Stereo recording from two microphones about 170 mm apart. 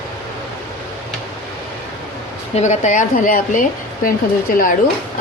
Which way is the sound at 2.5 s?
45° left (ahead or behind).